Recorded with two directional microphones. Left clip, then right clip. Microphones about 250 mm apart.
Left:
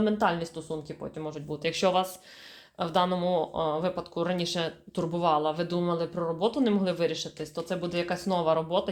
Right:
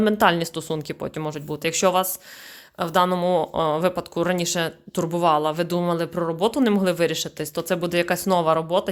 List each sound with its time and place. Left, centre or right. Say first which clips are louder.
0.0 s speech: right 8 dB; right